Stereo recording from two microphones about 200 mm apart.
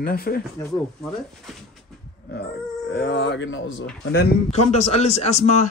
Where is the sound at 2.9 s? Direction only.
60° left (ahead or behind).